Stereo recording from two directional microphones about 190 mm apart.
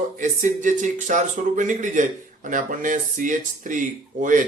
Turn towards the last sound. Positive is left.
turn(degrees=-45)  # may be behind; listen again after turning